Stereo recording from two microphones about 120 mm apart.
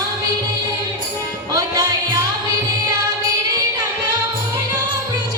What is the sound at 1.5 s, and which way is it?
Music, 30° right (ahead or behind).